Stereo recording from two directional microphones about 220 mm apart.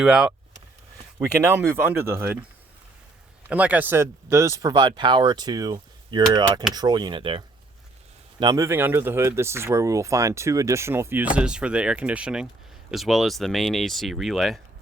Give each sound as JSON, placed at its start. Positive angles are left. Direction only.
{"t": 0.0, "sound": "speech", "side_deg": -5}
{"t": 1.4, "sound": "speech", "side_deg": -10}
{"t": 3.5, "sound": "speech", "side_deg": -5}